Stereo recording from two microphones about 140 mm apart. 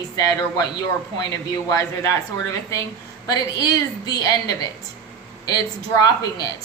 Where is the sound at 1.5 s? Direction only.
25° left (ahead or behind).